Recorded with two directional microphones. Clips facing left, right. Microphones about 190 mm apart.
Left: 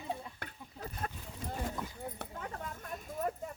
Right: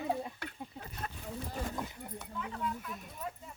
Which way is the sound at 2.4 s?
45° left (ahead or behind).